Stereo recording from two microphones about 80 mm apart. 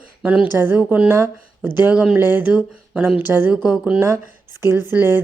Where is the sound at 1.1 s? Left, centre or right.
Right.